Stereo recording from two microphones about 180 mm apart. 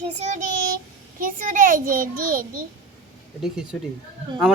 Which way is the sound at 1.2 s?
50° right (ahead or behind).